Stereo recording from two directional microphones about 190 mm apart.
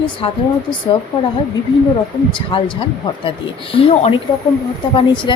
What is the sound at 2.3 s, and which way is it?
Speech, 25° left (ahead or behind).